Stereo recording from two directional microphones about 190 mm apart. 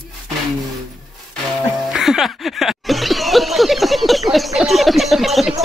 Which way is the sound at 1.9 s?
Centre (ahead or behind).